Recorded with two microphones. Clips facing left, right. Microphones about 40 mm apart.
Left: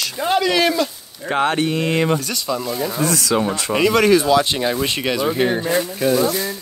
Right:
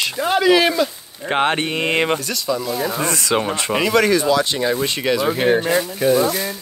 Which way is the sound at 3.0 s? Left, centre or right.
Right.